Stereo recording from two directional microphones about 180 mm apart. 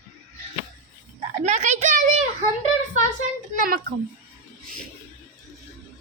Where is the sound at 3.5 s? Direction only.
50° right (ahead or behind).